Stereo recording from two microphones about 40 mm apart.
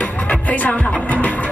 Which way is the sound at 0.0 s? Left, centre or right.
Left.